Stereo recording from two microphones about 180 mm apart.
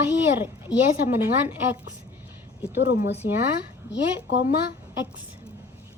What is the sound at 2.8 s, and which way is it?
Speech, 65° left (ahead or behind).